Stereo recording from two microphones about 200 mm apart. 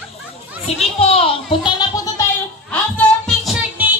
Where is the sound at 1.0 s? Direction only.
30° left (ahead or behind).